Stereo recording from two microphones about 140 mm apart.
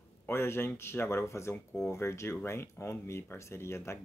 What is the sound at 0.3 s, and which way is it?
Speech, 15° left (ahead or behind).